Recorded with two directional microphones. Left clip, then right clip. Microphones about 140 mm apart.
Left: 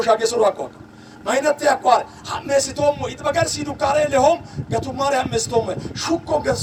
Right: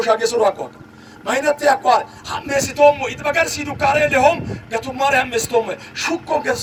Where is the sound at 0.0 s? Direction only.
35° right (ahead or behind).